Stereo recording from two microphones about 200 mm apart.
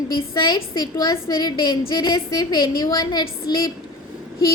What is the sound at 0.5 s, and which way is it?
A woman's voice, 20° left (ahead or behind).